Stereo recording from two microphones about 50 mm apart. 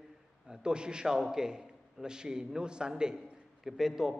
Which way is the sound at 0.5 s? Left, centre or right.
Centre.